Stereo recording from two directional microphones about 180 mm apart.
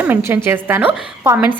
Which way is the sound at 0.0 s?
10° right (ahead or behind).